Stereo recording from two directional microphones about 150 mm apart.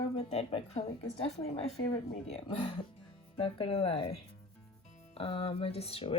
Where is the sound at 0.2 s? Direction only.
40° left (ahead or behind).